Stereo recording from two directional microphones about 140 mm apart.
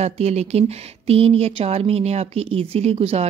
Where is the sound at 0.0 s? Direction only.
50° right (ahead or behind).